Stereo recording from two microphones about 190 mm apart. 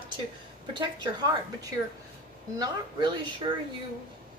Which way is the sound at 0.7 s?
20° right (ahead or behind).